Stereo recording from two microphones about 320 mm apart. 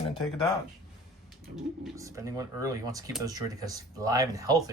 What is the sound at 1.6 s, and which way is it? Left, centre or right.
Speech, centre.